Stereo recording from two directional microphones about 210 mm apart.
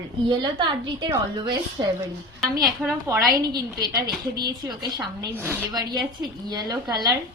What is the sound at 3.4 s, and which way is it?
A woman's voice, 20° right (ahead or behind).